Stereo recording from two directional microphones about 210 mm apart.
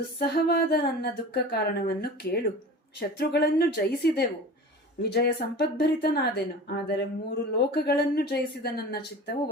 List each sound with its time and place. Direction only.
0.3 s speech: 50° left (ahead or behind)